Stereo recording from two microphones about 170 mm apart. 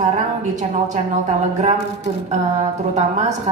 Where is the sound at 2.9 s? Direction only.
40° right (ahead or behind).